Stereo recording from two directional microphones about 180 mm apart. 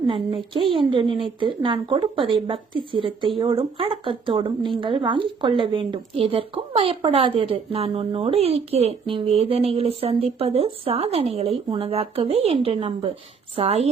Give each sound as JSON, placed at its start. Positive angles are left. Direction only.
{"t": 0.1, "sound": "speech", "side_deg": -25}